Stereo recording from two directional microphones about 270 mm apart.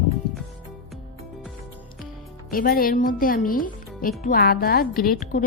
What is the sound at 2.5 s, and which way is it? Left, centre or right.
Speech, left.